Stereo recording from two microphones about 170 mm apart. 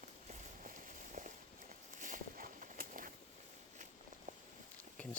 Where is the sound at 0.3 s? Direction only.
50° right (ahead or behind).